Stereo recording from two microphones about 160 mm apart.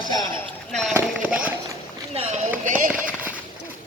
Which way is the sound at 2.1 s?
40° right (ahead or behind).